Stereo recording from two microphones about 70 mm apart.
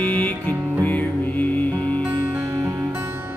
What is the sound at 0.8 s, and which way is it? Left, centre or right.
Music, left.